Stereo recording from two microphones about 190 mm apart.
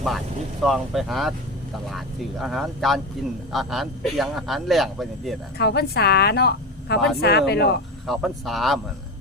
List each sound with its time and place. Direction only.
0.6 s a man's voice: centre (ahead or behind)
5.5 s a woman's voice: 60° left (ahead or behind)
8.0 s a man's voice: centre (ahead or behind)